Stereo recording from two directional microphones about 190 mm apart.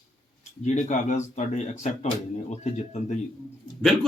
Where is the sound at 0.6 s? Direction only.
40° left (ahead or behind).